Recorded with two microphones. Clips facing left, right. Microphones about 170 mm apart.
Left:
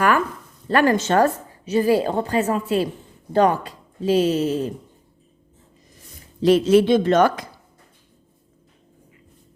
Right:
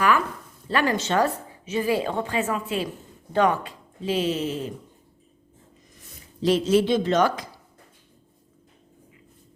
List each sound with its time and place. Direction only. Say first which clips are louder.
0.7 s a woman's voice: left 6 dB; 50° left (ahead or behind)
6.4 s speech: left 5 dB; 60° left (ahead or behind)